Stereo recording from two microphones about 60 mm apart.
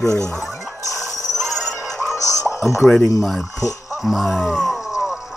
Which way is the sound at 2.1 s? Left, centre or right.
Left.